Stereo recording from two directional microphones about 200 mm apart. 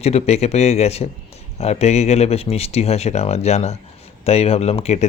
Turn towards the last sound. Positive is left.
turn(degrees=35)  # may be behind; listen again after turning